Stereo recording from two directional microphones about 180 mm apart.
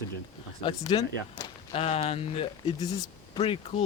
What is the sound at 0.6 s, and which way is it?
Speech, 25° left (ahead or behind).